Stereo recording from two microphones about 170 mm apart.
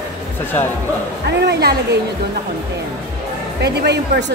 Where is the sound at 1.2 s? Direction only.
80° right.